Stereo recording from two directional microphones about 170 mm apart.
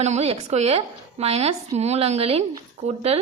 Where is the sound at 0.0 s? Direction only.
40° right (ahead or behind).